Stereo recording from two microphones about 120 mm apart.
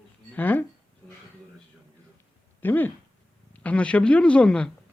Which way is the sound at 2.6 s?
15° left (ahead or behind).